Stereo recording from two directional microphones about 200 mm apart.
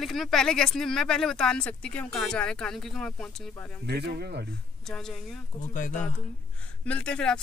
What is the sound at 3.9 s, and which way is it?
Speech, 55° right (ahead or behind).